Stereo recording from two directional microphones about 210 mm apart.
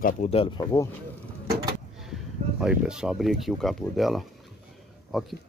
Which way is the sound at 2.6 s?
5° right (ahead or behind).